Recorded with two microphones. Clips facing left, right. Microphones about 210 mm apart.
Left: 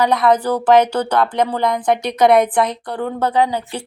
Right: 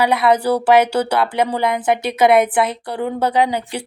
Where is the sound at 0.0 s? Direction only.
10° right (ahead or behind).